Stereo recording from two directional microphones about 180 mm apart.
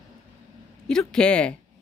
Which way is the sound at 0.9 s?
5° left (ahead or behind).